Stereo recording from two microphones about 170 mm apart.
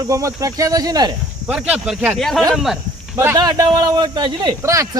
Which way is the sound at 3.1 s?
15° right (ahead or behind).